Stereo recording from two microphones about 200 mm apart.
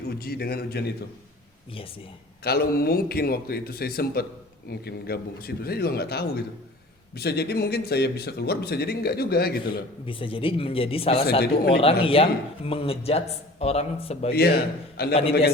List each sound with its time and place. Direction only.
0.2 s speech: 50° left (ahead or behind)
2.4 s speech: 50° left (ahead or behind)
10.1 s a man's voice: 25° left (ahead or behind)
11.3 s speech: 55° left (ahead or behind)
11.8 s a man's voice: 25° left (ahead or behind)
14.3 s speech: 50° left (ahead or behind)
15.1 s a man's voice: 30° left (ahead or behind)